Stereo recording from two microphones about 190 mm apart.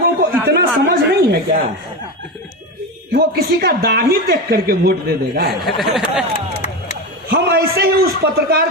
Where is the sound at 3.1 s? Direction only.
55° right (ahead or behind).